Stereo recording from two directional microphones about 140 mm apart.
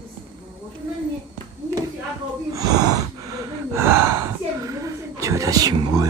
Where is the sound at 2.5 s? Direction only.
25° right (ahead or behind).